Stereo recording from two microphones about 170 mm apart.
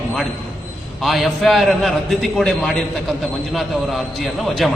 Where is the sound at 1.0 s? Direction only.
Centre (ahead or behind).